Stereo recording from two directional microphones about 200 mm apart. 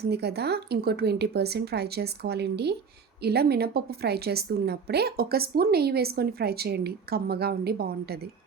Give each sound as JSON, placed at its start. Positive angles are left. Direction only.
{"t": 0.0, "sound": "a woman's voice", "side_deg": -55}